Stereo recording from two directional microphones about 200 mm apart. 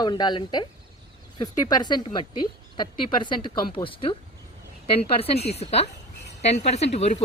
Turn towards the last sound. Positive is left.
turn(degrees=35)  # may be behind; listen again after turning